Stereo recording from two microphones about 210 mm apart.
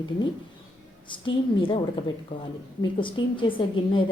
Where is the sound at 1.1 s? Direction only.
25° left (ahead or behind).